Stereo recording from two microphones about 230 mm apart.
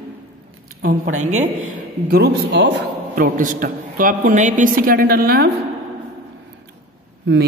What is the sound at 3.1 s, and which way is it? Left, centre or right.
A woman's voice, right.